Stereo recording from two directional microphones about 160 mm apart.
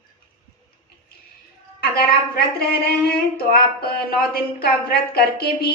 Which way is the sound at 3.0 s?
70° left (ahead or behind).